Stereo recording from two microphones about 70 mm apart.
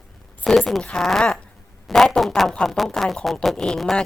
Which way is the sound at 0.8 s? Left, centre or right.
Centre.